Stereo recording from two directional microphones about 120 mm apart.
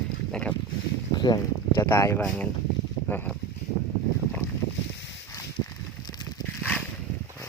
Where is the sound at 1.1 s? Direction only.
35° left (ahead or behind).